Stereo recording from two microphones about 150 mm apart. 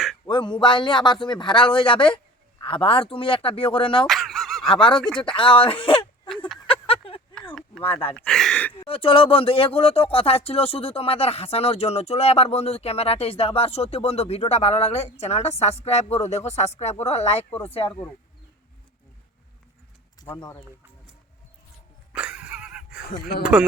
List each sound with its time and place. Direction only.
0.3 s a man's voice: 30° left (ahead or behind)
4.0 s a sound: centre (ahead or behind)
4.7 s a man's voice: 35° left (ahead or behind)
4.9 s a man's voice: 5° left (ahead or behind)
5.4 s speech: 35° left (ahead or behind)
6.7 s a sound: 40° left (ahead or behind)
8.1 s speech: 5° left (ahead or behind)
8.8 s speech: 35° left (ahead or behind)
20.2 s speech: 15° left (ahead or behind)
22.1 s a sound: 5° right (ahead or behind)
23.4 s a man's voice: 5° right (ahead or behind)